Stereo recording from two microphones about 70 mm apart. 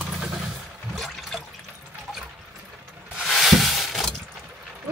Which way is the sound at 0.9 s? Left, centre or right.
Centre.